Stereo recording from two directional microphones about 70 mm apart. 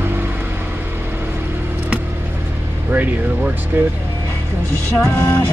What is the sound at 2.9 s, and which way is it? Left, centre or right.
Vehicle, right.